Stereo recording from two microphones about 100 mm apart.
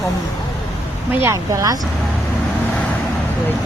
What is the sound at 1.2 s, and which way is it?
Speech, 35° right (ahead or behind).